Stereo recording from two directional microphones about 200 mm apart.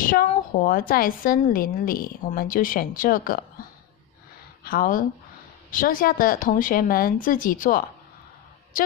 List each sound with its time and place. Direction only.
0.0 s a woman's voice: 45° left (ahead or behind)
4.6 s a woman's voice: 45° left (ahead or behind)